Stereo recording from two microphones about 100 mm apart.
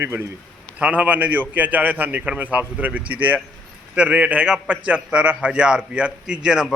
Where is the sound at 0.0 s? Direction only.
20° right (ahead or behind).